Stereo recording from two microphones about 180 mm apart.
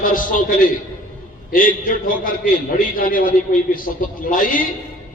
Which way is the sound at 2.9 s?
50° left (ahead or behind).